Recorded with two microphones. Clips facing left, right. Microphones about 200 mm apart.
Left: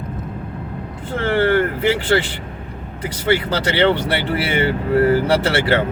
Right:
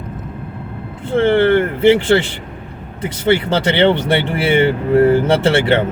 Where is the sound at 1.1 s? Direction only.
25° right (ahead or behind).